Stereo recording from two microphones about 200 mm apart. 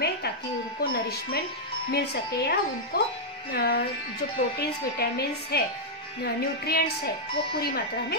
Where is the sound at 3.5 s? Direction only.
50° left (ahead or behind).